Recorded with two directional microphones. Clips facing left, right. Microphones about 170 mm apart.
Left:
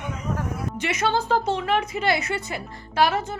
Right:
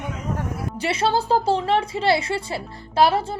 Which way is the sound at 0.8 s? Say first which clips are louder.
Right 3 dB; 30° right (ahead or behind).